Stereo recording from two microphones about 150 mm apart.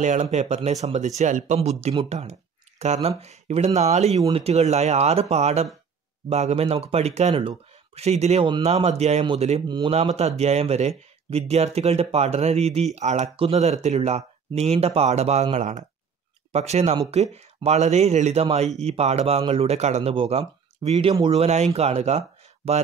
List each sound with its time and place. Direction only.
0.0 s a man's voice: 50° right (ahead or behind)
8.5 s speech: 30° right (ahead or behind)
8.8 s a man's voice: 45° right (ahead or behind)
9.7 s speech: 30° right (ahead or behind)
10.1 s a man's voice: 45° right (ahead or behind)